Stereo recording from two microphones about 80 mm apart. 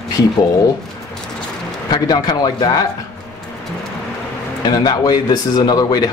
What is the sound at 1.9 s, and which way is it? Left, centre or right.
Speech, left.